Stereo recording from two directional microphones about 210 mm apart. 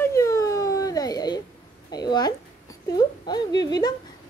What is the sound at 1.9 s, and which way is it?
A woman's voice, 20° left (ahead or behind).